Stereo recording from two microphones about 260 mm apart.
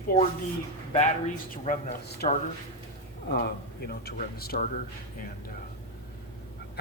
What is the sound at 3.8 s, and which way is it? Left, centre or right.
Speech, left.